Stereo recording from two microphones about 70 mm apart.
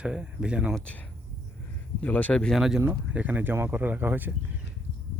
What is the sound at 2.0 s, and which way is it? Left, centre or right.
Speech, left.